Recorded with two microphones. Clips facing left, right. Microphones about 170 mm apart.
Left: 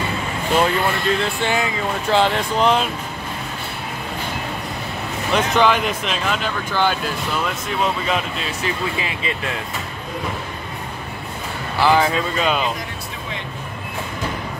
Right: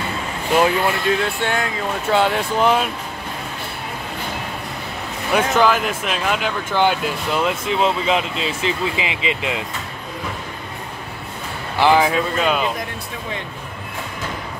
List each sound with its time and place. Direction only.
0.6 s speech: 5° right (ahead or behind)
5.3 s speech: 5° right (ahead or behind)
6.7 s speech: 20° right (ahead or behind)
11.8 s speech: 10° right (ahead or behind)